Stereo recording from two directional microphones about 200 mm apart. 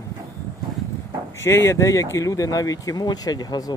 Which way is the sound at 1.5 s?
10° left (ahead or behind).